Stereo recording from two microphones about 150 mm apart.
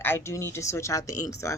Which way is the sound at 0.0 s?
15° left (ahead or behind).